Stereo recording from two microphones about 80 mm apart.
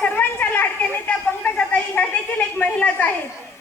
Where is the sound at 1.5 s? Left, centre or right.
Centre.